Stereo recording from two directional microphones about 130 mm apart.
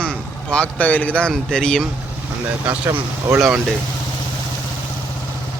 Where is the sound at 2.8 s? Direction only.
20° right (ahead or behind).